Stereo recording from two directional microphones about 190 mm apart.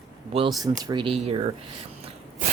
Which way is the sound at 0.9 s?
25° right (ahead or behind).